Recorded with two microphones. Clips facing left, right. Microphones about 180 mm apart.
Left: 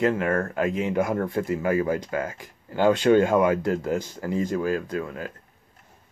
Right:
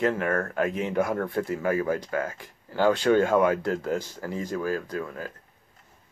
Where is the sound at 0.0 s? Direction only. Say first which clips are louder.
Left 2 dB; 15° left (ahead or behind).